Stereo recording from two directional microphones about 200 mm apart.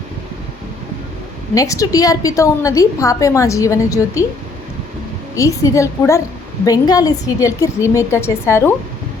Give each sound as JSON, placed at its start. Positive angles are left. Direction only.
{"t": 1.5, "sound": "a woman's voice", "side_deg": 15}
{"t": 5.3, "sound": "a woman's voice", "side_deg": 15}